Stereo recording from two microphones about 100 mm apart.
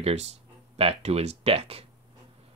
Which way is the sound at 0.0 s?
90° right.